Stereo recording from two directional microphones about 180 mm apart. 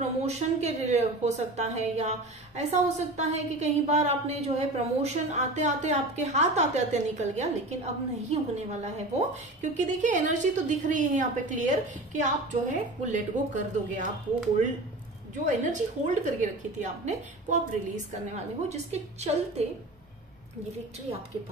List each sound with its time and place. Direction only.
0.2 s a woman's voice: 35° right (ahead or behind)
15.4 s a woman's voice: 45° right (ahead or behind)